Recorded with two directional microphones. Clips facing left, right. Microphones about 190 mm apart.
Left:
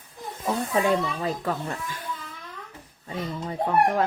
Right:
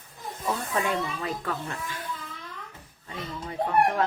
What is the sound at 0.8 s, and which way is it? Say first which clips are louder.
Speech: left 8 dB; 35° left (ahead or behind).